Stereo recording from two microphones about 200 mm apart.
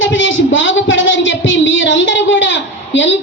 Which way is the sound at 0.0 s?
70° left (ahead or behind).